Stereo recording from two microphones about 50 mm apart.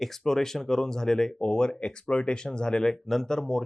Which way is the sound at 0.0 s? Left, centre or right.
Centre.